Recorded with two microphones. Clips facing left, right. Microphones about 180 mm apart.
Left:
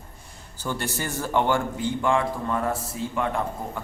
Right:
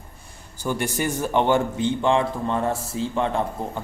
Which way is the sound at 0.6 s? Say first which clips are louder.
Right 5 dB; 15° right (ahead or behind).